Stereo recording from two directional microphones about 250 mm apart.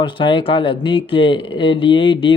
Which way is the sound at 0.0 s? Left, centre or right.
Centre.